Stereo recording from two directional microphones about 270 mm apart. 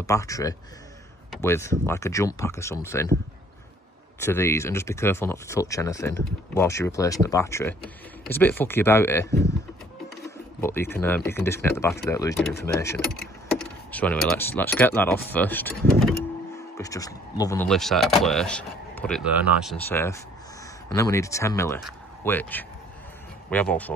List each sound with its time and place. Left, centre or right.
0.0 s speech: centre
4.2 s speech: centre
16.7 s speech: centre